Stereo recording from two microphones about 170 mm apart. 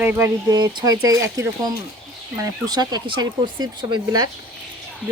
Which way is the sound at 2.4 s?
25° right (ahead or behind).